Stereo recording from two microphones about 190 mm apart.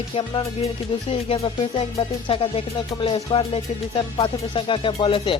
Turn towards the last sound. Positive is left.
turn(degrees=25)  # may be behind; listen again after turning